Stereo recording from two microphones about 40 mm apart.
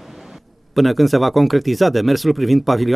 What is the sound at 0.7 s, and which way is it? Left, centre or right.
Speech, centre.